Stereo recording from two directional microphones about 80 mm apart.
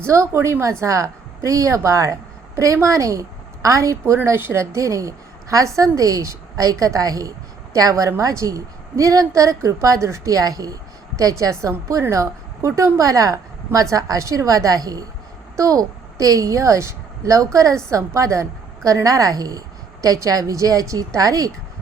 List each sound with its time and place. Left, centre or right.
0.0 s a woman's voice: right